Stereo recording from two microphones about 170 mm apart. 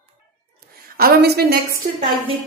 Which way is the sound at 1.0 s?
65° right (ahead or behind).